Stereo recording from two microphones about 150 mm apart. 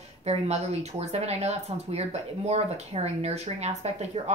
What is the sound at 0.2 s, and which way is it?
A woman's voice, 45° right (ahead or behind).